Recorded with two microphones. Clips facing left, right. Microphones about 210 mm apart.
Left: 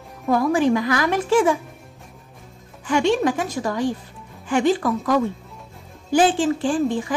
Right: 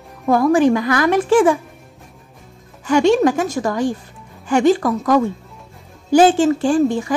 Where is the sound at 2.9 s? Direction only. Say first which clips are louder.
Right 5 dB; 40° right (ahead or behind).